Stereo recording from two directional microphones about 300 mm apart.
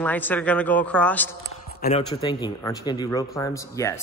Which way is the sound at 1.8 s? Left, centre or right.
Centre.